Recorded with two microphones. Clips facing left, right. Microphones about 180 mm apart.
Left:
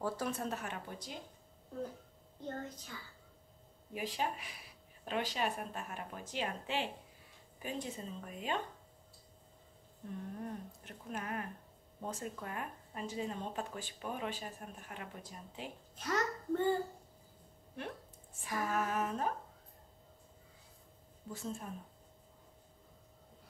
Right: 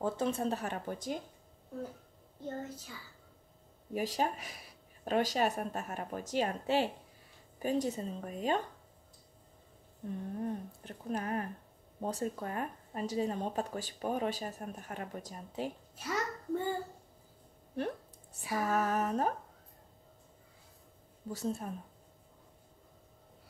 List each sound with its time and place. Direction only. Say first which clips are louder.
0.0 s speech: right 5 dB; 25° right (ahead or behind); by 1.2 s 45° right (ahead or behind)
2.4 s a child's voice: right 3 dB; 10° right (ahead or behind)
3.9 s speech: right 5 dB; 40° right (ahead or behind)
10.4 s speech: right 6 dB; 35° right (ahead or behind)
16.0 s a child's voice: left 1 dB; 10° right (ahead or behind)
18.5 s speech: right 4 dB; 40° right (ahead or behind)
21.3 s speech: right 6 dB; 40° right (ahead or behind)